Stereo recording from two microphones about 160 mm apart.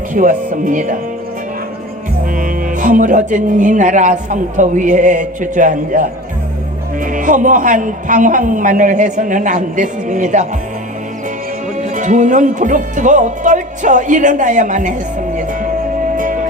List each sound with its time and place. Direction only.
0.1 s speech: 55° right (ahead or behind)
2.3 s speech: 55° right (ahead or behind)
11.8 s speech: 50° right (ahead or behind)
16.1 s music: 55° right (ahead or behind)